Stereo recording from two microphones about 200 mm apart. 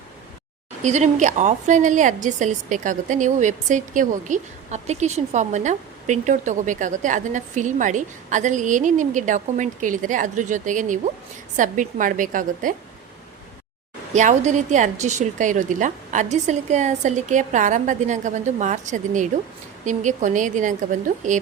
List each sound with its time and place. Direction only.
0.8 s a woman's voice: 35° right (ahead or behind)
14.1 s a woman's voice: 35° right (ahead or behind)